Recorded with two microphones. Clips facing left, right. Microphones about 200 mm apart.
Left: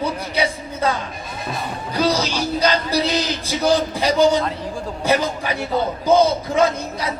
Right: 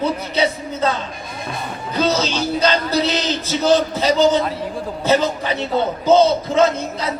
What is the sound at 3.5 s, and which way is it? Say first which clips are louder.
A man's voice: right 3 dB; 15° left (ahead or behind).